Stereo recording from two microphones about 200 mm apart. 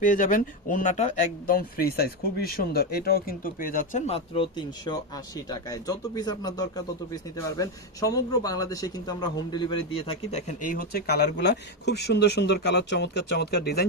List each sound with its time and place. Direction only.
0.0 s speech: 40° left (ahead or behind)